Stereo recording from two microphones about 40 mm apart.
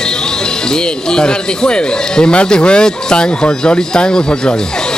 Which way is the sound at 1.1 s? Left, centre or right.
Left.